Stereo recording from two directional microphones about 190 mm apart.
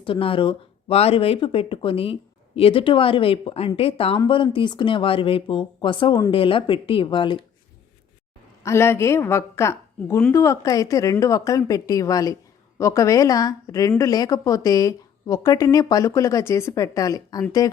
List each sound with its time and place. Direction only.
0.0 s speech: 30° left (ahead or behind)
8.6 s a woman's voice: 15° left (ahead or behind)